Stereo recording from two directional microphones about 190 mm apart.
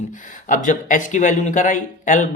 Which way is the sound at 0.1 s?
40° left (ahead or behind).